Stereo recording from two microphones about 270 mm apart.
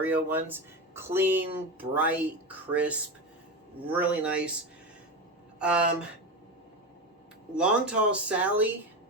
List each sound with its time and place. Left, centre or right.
0.0 s speech: centre
3.9 s speech: centre
5.5 s speech: centre
7.5 s speech: centre